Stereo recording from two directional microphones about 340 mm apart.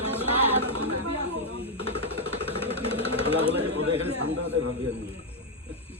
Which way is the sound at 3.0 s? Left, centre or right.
Centre.